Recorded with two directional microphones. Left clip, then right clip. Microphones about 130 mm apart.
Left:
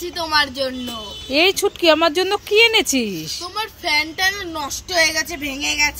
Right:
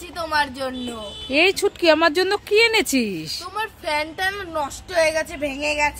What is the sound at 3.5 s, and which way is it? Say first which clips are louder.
Speech: left 4 dB; 25° right (ahead or behind).